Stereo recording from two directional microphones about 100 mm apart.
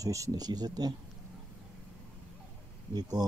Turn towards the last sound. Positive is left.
turn(degrees=-45)  # may be behind; listen again after turning